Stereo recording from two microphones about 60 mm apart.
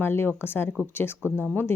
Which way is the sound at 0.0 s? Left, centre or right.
Left.